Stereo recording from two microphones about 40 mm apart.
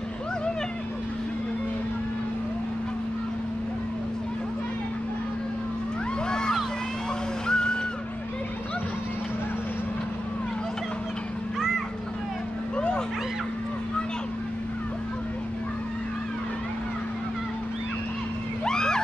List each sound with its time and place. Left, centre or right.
6.2 s vehicle: centre
7.4 s music: centre
12.7 s a sound: left
18.6 s vehicle: centre